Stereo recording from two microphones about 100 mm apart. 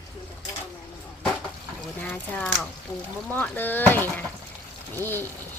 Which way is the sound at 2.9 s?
35° left (ahead or behind).